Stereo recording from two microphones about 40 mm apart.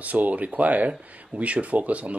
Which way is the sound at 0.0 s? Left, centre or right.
Right.